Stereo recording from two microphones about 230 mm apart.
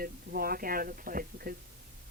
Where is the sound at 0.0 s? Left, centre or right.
Right.